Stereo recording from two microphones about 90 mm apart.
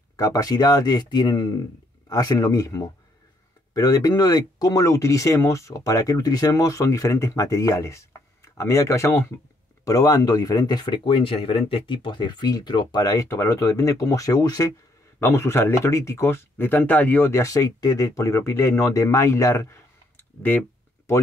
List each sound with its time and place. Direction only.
0.1 s speech: 40° left (ahead or behind)
2.0 s speech: 40° left (ahead or behind)
9.8 s speech: 40° left (ahead or behind)
15.1 s speech: 30° left (ahead or behind)